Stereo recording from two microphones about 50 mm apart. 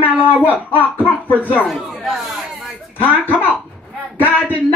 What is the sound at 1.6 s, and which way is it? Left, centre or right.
Speech, centre.